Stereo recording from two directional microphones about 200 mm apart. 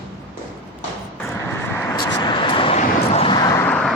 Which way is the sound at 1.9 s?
15° left (ahead or behind).